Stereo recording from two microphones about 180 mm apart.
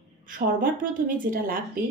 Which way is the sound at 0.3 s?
50° right (ahead or behind).